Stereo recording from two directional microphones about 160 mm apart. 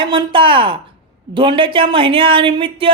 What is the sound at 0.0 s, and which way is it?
Speech, 30° right (ahead or behind).